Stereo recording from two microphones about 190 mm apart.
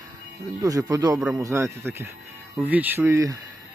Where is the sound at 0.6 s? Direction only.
20° right (ahead or behind).